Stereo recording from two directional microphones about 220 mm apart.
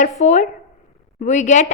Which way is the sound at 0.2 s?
30° left (ahead or behind).